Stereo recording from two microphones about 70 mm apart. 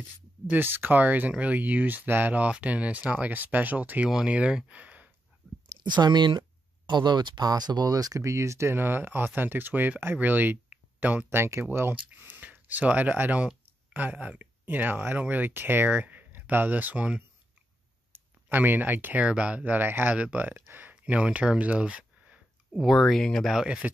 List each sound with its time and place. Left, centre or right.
0.5 s speech: right
5.7 s speech: right
11.2 s speech: right
11.9 s speech: right
20.9 s speech: centre
22.8 s speech: centre
23.5 s speech: centre